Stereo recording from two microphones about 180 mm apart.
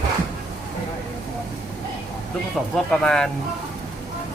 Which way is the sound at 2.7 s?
5° left (ahead or behind).